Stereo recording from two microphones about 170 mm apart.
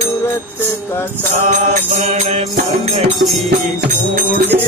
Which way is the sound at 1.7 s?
45° right (ahead or behind).